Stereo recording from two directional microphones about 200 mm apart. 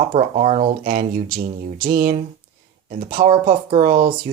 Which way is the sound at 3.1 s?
30° right (ahead or behind).